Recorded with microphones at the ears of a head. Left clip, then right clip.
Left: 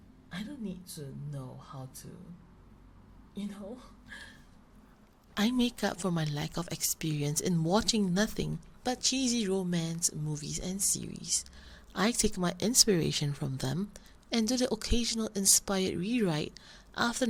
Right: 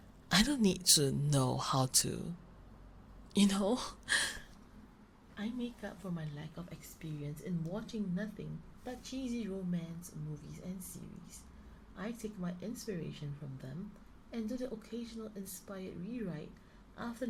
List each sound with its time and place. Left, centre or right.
0.3 s speech: right
3.3 s speech: right
5.3 s a woman's voice: left